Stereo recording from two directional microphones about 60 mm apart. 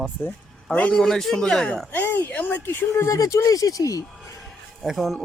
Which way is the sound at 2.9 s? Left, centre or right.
Left.